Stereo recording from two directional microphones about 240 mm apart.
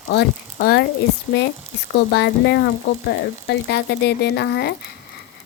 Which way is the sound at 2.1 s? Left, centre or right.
Left.